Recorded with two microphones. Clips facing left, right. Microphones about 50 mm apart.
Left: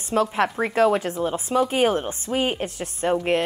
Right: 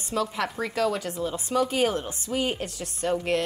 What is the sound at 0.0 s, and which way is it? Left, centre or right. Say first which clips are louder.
A woman's voice: left 6 dB; left.